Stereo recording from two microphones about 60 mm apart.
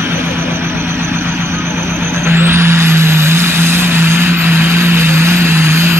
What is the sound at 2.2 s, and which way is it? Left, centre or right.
Vehicle, right.